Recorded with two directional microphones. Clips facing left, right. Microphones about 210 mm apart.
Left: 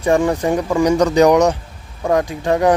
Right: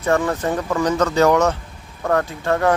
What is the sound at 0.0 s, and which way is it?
Speech, 15° left (ahead or behind).